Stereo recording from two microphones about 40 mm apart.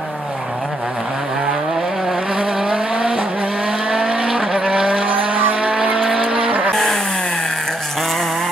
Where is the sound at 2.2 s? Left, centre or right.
Right.